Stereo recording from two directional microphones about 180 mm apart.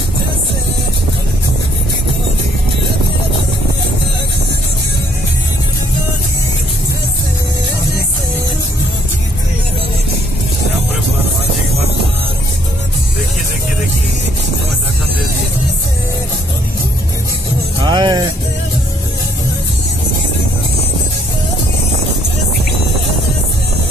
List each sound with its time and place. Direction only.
17.8 s music: 25° right (ahead or behind)